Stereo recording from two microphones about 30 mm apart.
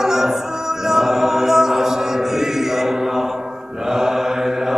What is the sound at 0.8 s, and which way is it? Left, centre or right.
Chant, centre.